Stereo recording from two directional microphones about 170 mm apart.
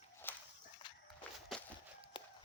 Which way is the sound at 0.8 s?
25° left (ahead or behind).